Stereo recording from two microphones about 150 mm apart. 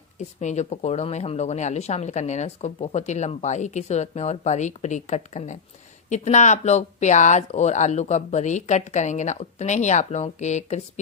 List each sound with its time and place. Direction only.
0.2 s speech: 50° left (ahead or behind)